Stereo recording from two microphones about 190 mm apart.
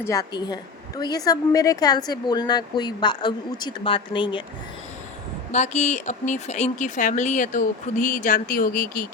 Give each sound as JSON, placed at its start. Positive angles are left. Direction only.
{"t": 0.0, "sound": "a woman's voice", "side_deg": 20}
{"t": 5.5, "sound": "speech", "side_deg": 35}